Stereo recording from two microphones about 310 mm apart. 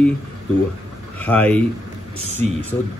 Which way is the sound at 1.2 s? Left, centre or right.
Centre.